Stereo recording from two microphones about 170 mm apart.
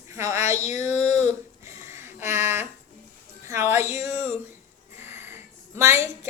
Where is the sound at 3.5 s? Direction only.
15° right (ahead or behind).